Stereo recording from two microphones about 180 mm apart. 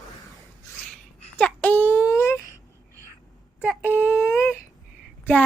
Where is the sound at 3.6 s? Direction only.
10° right (ahead or behind).